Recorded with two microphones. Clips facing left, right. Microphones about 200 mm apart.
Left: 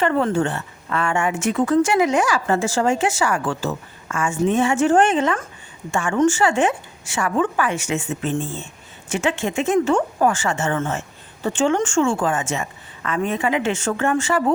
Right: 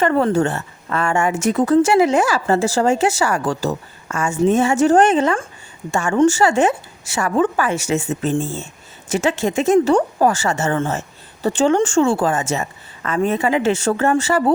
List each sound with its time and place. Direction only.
0.0 s a woman's voice: 40° right (ahead or behind)